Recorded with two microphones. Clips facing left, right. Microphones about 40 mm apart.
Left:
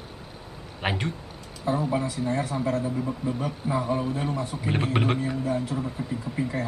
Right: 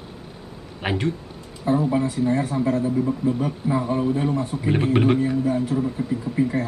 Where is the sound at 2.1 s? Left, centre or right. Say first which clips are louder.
Right 6 dB; centre.